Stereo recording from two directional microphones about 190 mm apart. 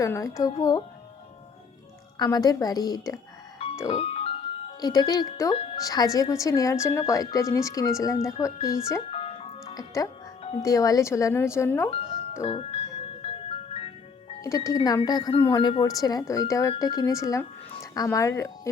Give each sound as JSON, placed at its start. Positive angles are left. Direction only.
{"t": 0.0, "sound": "a woman's voice", "side_deg": 15}
{"t": 2.1, "sound": "speech", "side_deg": 20}
{"t": 3.6, "sound": "music", "side_deg": 30}
{"t": 4.8, "sound": "a woman's voice", "side_deg": 20}
{"t": 9.0, "sound": "music", "side_deg": 30}
{"t": 9.7, "sound": "a woman's voice", "side_deg": 20}
{"t": 11.9, "sound": "music", "side_deg": 30}
{"t": 14.4, "sound": "a woman's voice", "side_deg": 15}